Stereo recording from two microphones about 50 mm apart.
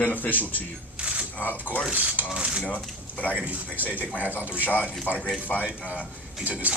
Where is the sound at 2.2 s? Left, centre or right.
Centre.